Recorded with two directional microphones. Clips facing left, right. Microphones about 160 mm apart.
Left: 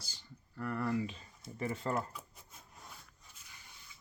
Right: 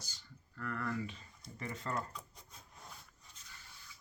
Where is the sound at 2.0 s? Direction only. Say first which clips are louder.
Left 3 dB; 5° left (ahead or behind).